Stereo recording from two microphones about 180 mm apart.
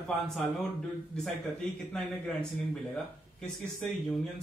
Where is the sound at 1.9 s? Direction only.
5° left (ahead or behind).